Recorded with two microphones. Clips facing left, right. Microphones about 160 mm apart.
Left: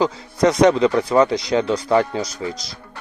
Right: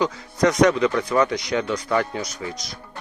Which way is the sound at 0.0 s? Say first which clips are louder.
Left 3 dB; 30° left (ahead or behind).